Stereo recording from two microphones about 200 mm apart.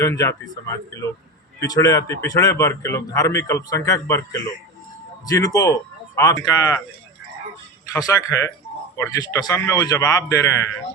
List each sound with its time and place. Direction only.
0.0 s a man's voice: 15° left (ahead or behind)
7.9 s a man's voice: 15° left (ahead or behind)